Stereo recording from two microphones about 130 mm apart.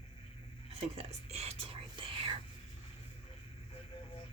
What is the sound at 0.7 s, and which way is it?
Whispering, 50° right (ahead or behind).